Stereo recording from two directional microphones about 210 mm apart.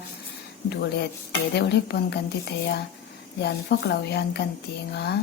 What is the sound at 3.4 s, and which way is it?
A woman's voice, 50° left (ahead or behind).